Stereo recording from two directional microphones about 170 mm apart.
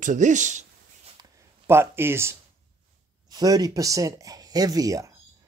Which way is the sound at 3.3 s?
20° right (ahead or behind).